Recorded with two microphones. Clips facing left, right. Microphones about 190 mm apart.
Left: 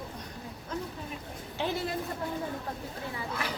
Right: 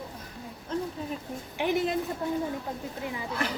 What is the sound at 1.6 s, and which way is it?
Speech, 20° right (ahead or behind).